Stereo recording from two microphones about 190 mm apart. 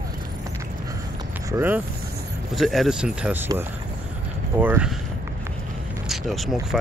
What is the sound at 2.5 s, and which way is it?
Speech, centre (ahead or behind).